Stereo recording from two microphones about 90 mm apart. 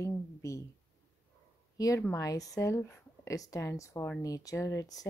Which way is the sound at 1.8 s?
40° left (ahead or behind).